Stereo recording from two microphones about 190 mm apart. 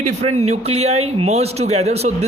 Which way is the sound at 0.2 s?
35° right (ahead or behind).